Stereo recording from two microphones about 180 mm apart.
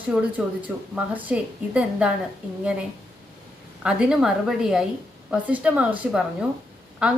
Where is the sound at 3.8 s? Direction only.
5° right (ahead or behind).